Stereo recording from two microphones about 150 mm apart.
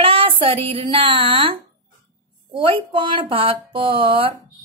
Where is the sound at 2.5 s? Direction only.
35° right (ahead or behind).